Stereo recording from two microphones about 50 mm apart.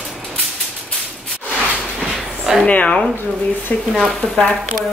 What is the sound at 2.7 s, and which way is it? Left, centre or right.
Speech, left.